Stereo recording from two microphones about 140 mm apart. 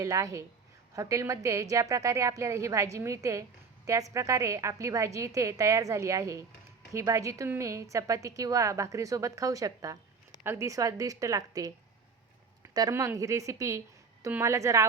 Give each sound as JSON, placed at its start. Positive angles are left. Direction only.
{"t": 0.0, "sound": "a woman's voice", "side_deg": -25}